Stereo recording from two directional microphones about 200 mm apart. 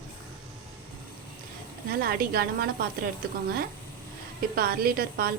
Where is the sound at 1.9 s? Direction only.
45° right (ahead or behind).